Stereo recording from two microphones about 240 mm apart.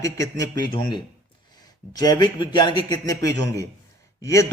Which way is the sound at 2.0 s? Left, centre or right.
Centre.